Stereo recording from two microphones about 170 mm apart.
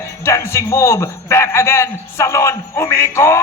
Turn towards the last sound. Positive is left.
turn(degrees=15)  # may be behind; listen again after turning